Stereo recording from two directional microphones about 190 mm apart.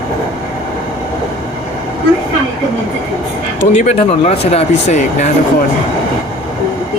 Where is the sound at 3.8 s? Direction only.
35° left (ahead or behind).